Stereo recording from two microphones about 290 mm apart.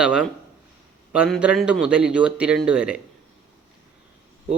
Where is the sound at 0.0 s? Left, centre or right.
Centre.